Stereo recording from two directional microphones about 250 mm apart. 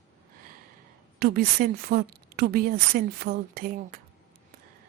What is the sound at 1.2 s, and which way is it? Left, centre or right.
A woman's voice, right.